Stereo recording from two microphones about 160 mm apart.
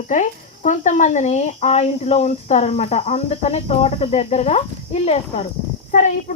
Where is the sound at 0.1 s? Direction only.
50° left (ahead or behind).